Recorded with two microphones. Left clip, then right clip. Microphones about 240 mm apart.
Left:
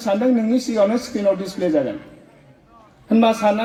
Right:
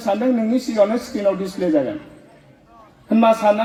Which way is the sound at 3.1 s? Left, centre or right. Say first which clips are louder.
Right 2 dB; left.